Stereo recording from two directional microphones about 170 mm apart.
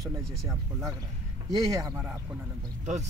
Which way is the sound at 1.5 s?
20° right (ahead or behind).